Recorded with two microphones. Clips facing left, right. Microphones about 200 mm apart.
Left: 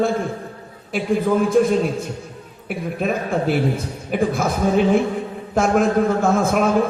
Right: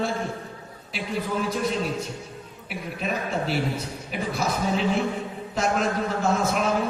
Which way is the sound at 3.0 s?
50° left (ahead or behind).